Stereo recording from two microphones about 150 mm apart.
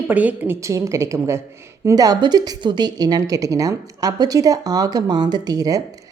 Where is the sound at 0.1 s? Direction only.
10° right (ahead or behind).